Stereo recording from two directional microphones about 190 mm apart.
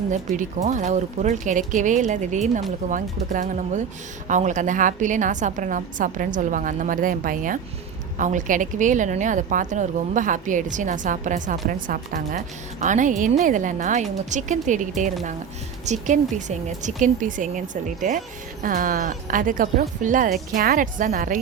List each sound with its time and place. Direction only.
0.1 s a woman's voice: 40° right (ahead or behind)